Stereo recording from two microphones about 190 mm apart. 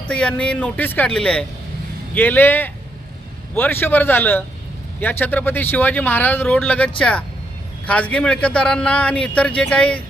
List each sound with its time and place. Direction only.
0.1 s speech: 5° left (ahead or behind)